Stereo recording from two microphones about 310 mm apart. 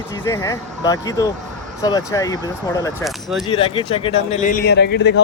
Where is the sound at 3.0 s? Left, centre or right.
Centre.